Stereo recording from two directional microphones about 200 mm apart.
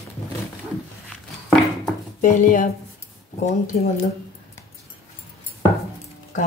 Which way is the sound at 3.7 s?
35° left (ahead or behind).